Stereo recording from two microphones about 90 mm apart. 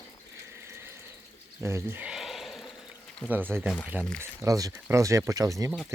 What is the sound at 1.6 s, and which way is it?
Speech, 30° right (ahead or behind).